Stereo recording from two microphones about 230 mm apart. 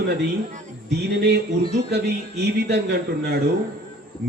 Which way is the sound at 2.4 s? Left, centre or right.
Right.